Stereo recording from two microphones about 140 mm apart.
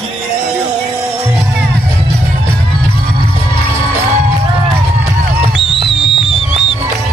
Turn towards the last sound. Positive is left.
turn(degrees=35)  # may be behind; listen again after turning